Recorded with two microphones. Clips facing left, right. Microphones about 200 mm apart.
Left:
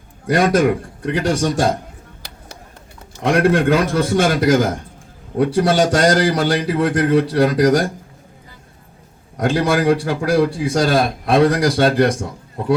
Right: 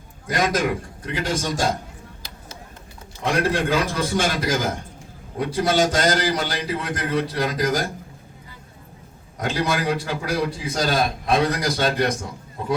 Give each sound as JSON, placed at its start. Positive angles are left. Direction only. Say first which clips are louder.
{"t": 0.3, "sound": "a man's voice", "louder": "left 7 dB", "side_deg": 55}
{"t": 3.2, "sound": "a man's voice", "louder": "left 7 dB", "side_deg": 55}
{"t": 9.4, "sound": "a man's voice", "louder": "left 7 dB", "side_deg": 50}